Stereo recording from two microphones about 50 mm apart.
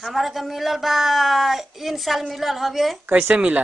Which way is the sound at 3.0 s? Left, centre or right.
Right.